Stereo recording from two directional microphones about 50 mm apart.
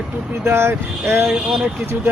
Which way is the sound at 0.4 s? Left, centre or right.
Right.